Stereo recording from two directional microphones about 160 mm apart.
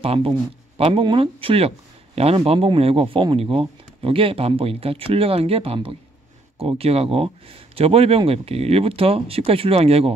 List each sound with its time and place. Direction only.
0.0 s speech: 35° right (ahead or behind)